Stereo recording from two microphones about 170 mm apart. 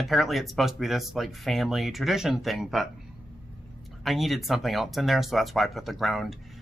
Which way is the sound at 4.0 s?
Centre (ahead or behind).